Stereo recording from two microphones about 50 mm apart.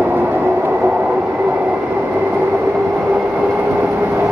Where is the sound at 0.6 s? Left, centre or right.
Right.